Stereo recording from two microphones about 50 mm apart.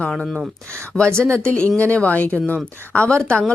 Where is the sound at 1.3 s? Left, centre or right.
Left.